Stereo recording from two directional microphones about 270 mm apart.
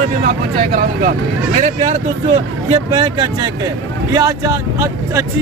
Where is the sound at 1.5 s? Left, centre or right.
Right.